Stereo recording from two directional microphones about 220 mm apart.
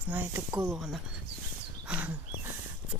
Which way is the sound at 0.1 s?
10° right (ahead or behind).